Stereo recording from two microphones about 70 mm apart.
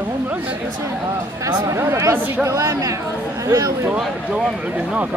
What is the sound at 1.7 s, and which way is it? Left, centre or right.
Speech, right.